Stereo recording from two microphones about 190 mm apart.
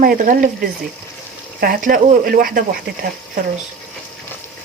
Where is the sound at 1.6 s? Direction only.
50° right (ahead or behind).